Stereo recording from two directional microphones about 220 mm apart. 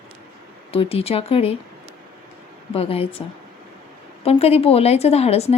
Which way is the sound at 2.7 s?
25° left (ahead or behind).